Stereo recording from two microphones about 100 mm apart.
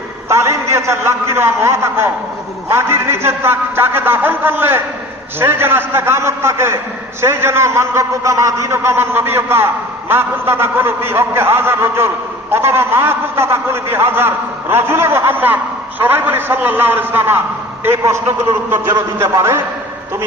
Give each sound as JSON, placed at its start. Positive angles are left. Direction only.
{"t": 0.3, "sound": "a man's voice", "side_deg": -25}